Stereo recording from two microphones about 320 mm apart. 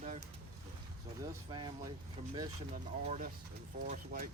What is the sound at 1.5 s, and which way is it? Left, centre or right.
Speech, centre.